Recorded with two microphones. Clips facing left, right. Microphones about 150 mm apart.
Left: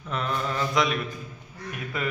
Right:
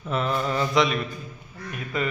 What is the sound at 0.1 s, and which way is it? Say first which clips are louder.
A man's voice: right 4 dB; 5° right (ahead or behind).